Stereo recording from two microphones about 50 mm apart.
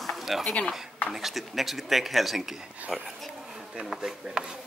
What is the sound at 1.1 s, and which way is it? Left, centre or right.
Speech, centre.